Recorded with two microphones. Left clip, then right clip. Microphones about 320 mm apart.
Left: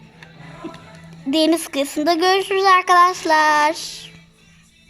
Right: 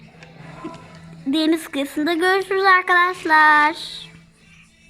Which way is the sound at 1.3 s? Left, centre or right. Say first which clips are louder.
Left 3 dB; centre.